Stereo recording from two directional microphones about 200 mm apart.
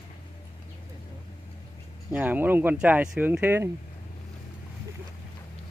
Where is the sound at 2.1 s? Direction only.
10° right (ahead or behind).